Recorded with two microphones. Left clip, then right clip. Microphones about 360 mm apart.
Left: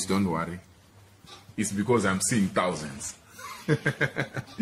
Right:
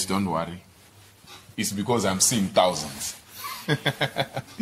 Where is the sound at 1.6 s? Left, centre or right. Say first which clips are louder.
Even; centre.